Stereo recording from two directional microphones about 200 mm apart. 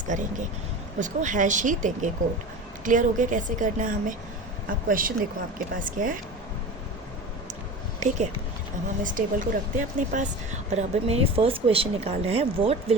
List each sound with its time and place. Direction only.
0.1 s speech: 40° right (ahead or behind)
7.9 s speech: 35° right (ahead or behind)